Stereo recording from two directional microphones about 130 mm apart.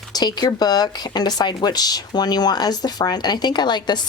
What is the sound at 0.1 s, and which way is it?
Speech, 30° left (ahead or behind).